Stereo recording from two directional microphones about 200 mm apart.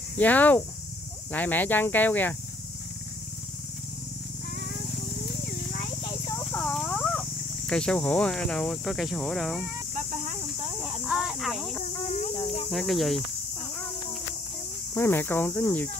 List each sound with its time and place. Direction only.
0.2 s speech: 10° left (ahead or behind)
6.0 s a sound: 20° left (ahead or behind)
6.4 s cricket: 5° left (ahead or behind)
9.9 s a sound: 35° right (ahead or behind)
11.1 s speech: centre (ahead or behind)
12.4 s speech: 30° left (ahead or behind)
12.7 s speech: centre (ahead or behind)
15.0 s speech: 10° left (ahead or behind)